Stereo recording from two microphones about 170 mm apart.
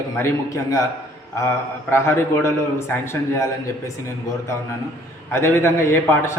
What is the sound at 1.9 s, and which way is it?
A man's voice, 15° left (ahead or behind).